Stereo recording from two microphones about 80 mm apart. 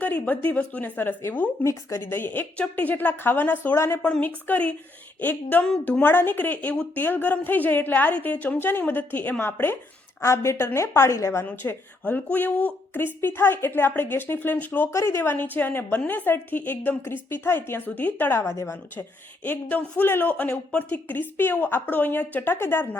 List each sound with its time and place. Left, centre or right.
0.0 s a woman's voice: left
3.8 s a woman's voice: left
4.0 s a woman's voice: centre
10.2 s a woman's voice: left
11.4 s a woman's voice: left
14.8 s a woman's voice: left
19.5 s a woman's voice: centre